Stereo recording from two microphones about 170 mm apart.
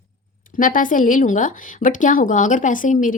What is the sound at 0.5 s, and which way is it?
Speech, 55° left (ahead or behind).